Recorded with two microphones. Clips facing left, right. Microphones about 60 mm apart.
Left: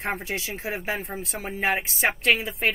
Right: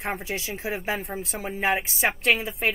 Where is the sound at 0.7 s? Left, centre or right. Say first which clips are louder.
Right 1 dB; centre.